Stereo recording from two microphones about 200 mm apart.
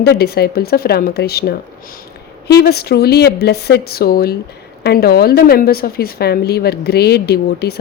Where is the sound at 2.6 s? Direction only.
50° left (ahead or behind).